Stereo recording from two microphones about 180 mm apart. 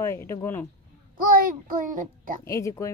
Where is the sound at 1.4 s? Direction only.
50° right (ahead or behind).